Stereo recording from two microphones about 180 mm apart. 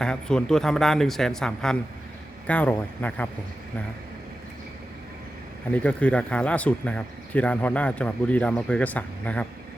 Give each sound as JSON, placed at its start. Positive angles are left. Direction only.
{"t": 0.0, "sound": "speech", "side_deg": 5}
{"t": 5.7, "sound": "speech", "side_deg": 5}